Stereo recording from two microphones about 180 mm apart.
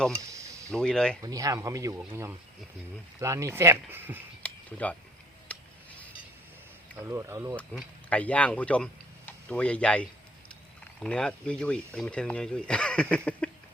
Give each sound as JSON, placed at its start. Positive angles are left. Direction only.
{"t": 0.2, "sound": "a sound", "side_deg": -15}
{"t": 0.7, "sound": "speech", "side_deg": 5}
{"t": 1.2, "sound": "speech", "side_deg": -20}
{"t": 4.4, "sound": "a sound", "side_deg": 10}
{"t": 7.0, "sound": "speech", "side_deg": -15}
{"t": 7.5, "sound": "speech", "side_deg": 5}